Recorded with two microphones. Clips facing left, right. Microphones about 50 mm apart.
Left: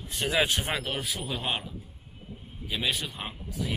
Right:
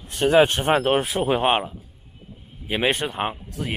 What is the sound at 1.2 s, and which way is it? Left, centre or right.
Speech, right.